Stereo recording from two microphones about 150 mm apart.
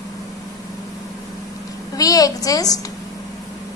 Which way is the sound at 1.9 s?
25° left (ahead or behind).